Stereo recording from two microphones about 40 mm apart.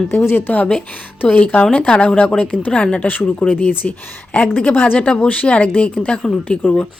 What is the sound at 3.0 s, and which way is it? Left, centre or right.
Speech, left.